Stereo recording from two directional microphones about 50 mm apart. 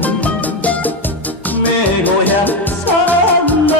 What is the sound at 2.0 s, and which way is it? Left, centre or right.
Music, left.